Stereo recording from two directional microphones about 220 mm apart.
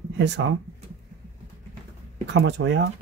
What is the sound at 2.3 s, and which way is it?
Speech, 55° right (ahead or behind).